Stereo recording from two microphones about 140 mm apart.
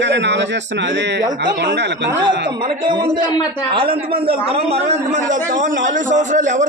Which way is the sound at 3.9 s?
40° right (ahead or behind).